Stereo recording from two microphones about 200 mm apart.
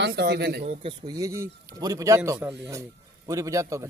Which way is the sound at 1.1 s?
15° right (ahead or behind).